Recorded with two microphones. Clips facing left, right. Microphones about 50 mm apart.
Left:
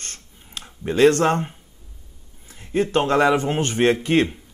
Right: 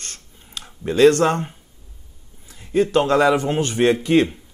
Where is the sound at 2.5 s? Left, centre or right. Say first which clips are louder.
Right 3 dB; left.